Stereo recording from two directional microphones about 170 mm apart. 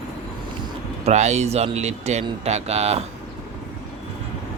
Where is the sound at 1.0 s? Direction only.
40° right (ahead or behind).